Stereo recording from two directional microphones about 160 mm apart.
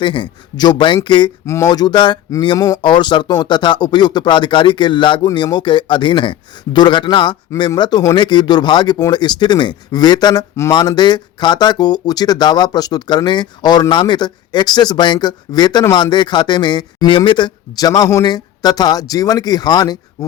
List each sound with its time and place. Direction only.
0.0 s speech: 30° left (ahead or behind)